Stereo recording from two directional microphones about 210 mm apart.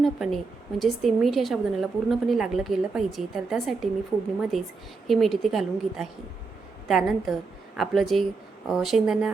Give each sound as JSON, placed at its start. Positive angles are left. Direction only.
{"t": 0.0, "sound": "a woman's voice", "side_deg": 0}